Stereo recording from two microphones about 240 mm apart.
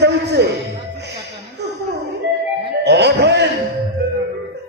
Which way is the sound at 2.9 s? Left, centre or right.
Right.